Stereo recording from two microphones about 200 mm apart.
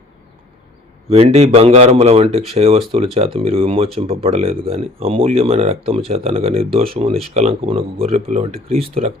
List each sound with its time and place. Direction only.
1.1 s speech: 30° right (ahead or behind)